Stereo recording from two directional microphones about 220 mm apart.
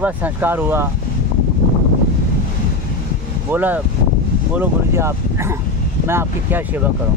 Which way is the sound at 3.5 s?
10° right (ahead or behind).